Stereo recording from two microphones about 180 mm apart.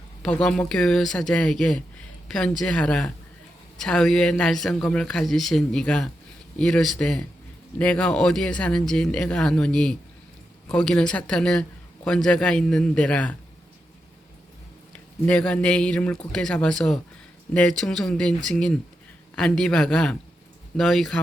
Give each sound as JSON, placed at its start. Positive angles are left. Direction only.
{"t": 0.2, "sound": "a man's voice", "side_deg": 5}
{"t": 14.9, "sound": "a man's voice", "side_deg": 5}